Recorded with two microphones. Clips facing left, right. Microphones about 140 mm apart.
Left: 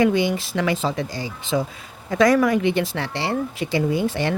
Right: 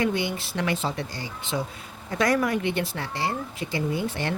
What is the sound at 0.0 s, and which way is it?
Speech, 90° left.